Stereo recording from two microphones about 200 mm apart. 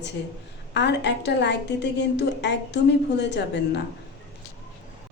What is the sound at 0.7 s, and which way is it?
A woman's voice, 60° left (ahead or behind).